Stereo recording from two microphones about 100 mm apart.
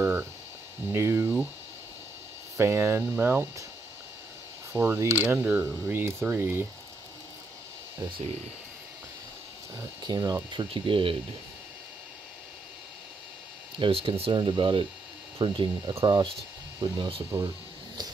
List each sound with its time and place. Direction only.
0.0 s a sound: 20° right (ahead or behind)
0.9 s speech: 25° right (ahead or behind)
2.5 s speech: 25° right (ahead or behind)
4.7 s speech: 20° right (ahead or behind)
10.0 s speech: 40° right (ahead or behind)
10.5 s speech: 55° right (ahead or behind)
13.7 s speech: 60° right (ahead or behind)
14.3 s speech: 50° right (ahead or behind)
17.3 s speech: 25° right (ahead or behind)